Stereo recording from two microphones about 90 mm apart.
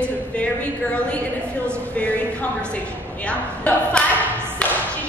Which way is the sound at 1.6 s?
15° left (ahead or behind).